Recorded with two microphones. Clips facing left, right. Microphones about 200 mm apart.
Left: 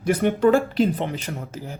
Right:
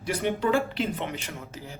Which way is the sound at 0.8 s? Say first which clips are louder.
Left 8 dB; 35° left (ahead or behind).